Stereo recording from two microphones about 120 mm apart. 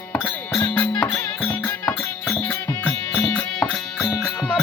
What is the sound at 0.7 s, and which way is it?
Music, 15° left (ahead or behind).